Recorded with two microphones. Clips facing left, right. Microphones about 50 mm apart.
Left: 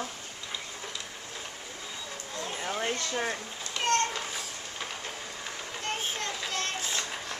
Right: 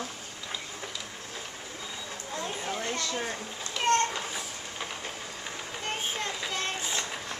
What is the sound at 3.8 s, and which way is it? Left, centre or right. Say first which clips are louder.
Train: right 2 dB; right.